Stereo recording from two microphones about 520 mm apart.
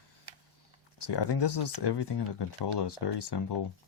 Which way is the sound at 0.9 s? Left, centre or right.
Left.